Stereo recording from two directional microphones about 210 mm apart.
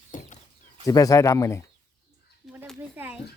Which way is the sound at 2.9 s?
5° right (ahead or behind).